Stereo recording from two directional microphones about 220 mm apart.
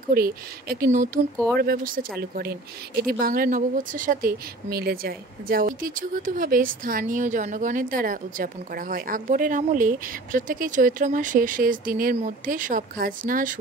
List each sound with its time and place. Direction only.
0.1 s speech: 45° right (ahead or behind)